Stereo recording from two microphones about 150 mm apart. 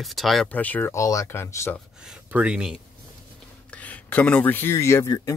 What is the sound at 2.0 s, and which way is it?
Speech, 5° right (ahead or behind).